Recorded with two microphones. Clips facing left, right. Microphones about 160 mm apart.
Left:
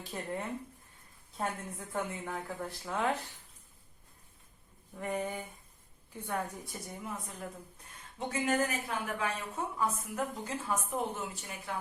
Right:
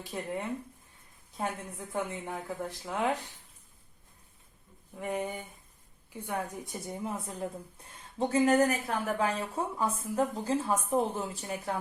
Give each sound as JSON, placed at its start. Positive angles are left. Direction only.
{"t": 0.1, "sound": "a woman's voice", "side_deg": -10}
{"t": 4.9, "sound": "a woman's voice", "side_deg": -5}
{"t": 6.8, "sound": "a woman's voice", "side_deg": -30}